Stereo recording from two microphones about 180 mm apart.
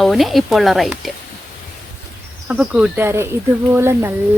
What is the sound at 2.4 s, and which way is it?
Speech, 5° right (ahead or behind).